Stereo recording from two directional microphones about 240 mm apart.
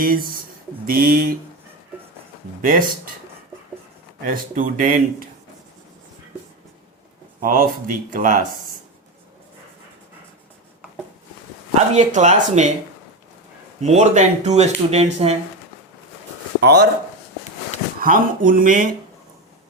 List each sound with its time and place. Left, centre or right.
0.0 s speech: right
2.6 s speech: right
4.2 s speech: right
7.4 s speech: right
11.9 s speech: right
13.8 s speech: right
16.6 s speech: right
18.0 s speech: right